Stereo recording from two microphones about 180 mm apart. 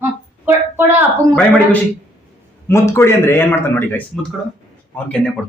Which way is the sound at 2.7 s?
15° left (ahead or behind).